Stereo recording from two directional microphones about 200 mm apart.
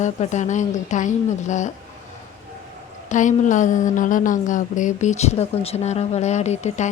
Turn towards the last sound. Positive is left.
turn(degrees=35)  # may be behind; listen again after turning